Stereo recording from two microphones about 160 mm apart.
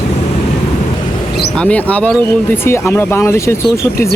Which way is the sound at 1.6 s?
10° left (ahead or behind).